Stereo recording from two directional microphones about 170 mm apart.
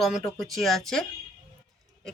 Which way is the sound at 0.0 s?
Centre (ahead or behind).